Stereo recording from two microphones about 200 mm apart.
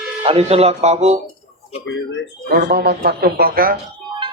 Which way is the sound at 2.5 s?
50° right (ahead or behind).